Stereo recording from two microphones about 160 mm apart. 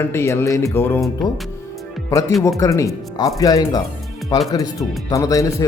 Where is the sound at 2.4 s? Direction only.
20° left (ahead or behind).